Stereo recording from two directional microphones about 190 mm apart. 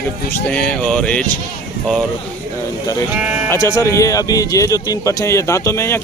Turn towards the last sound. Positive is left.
turn(degrees=15)  # may be behind; listen again after turning